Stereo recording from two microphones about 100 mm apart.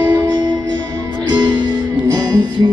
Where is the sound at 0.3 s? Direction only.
45° right (ahead or behind).